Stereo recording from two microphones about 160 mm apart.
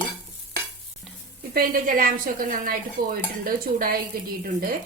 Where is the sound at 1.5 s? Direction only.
65° right (ahead or behind).